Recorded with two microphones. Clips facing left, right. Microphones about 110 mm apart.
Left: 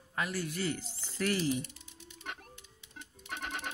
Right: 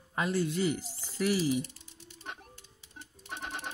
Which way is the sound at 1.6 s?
35° right (ahead or behind).